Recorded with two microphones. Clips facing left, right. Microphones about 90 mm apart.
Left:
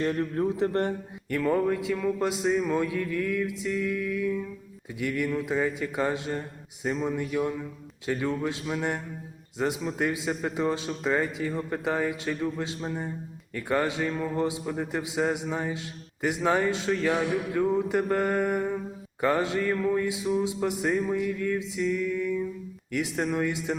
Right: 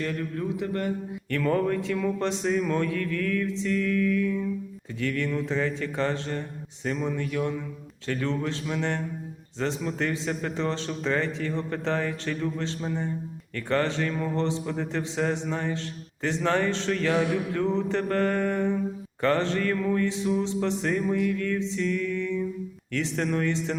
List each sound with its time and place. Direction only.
0.0 s a man's voice: 30° left (ahead or behind)
1.3 s a man's voice: 10° left (ahead or behind)